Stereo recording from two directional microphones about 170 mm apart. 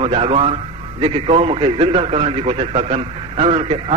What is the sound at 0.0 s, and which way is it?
A man's voice, 35° right (ahead or behind).